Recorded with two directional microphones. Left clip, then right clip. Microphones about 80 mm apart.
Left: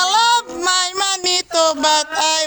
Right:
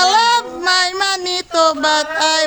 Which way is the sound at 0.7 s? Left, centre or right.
Centre.